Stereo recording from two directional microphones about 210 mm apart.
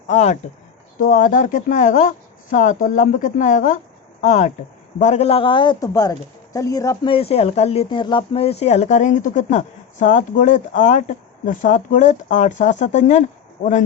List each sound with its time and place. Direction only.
0.1 s a woman's voice: 35° left (ahead or behind)